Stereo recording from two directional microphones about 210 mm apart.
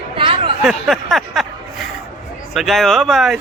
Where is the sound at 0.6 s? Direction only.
Centre (ahead or behind).